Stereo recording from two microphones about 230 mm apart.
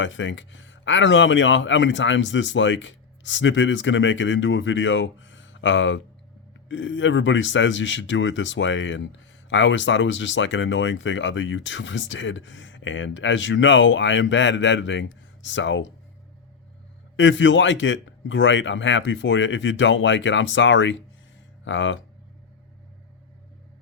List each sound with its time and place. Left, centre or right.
0.0 s speech: left
17.2 s speech: left